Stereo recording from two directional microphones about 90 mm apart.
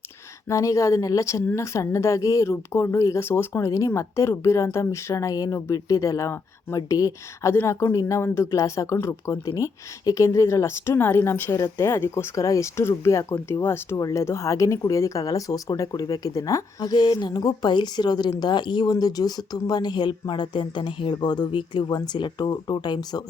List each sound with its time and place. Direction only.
0.4 s speech: 35° left (ahead or behind)
16.9 s a woman's voice: 50° left (ahead or behind)